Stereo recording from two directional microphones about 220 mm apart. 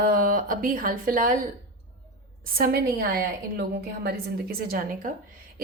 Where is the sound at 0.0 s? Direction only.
40° right (ahead or behind).